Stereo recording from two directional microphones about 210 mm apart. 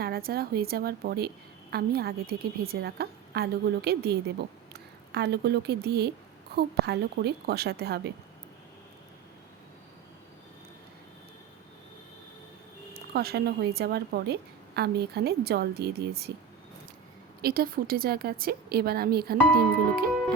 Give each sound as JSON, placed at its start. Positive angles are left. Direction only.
{"t": 0.0, "sound": "a woman's voice", "side_deg": -45}
{"t": 12.9, "sound": "a woman's voice", "side_deg": -50}
{"t": 17.4, "sound": "a woman's voice", "side_deg": -45}